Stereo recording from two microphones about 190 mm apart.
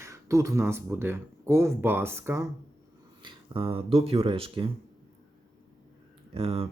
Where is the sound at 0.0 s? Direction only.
15° right (ahead or behind).